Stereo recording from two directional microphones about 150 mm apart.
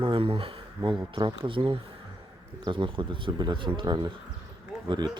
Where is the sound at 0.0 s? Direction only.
35° right (ahead or behind).